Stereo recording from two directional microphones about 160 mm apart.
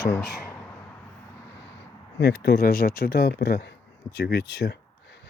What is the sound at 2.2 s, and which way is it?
Speech, 90° left.